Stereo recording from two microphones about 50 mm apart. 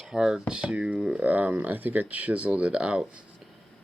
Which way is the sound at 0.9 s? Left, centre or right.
Centre.